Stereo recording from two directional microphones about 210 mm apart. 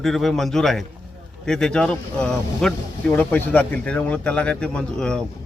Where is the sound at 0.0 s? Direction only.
Centre (ahead or behind).